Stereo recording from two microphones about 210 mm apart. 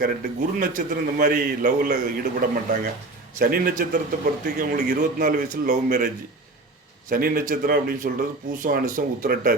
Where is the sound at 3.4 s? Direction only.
45° right (ahead or behind).